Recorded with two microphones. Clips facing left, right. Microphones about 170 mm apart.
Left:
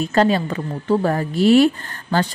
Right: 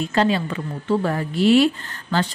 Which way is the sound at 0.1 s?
45° left (ahead or behind).